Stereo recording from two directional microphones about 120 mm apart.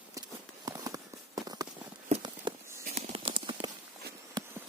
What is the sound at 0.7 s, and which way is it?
Clip-clop, 30° right (ahead or behind).